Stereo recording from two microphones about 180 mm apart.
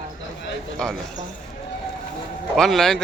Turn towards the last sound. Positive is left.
turn(degrees=5)  # may be behind; listen again after turning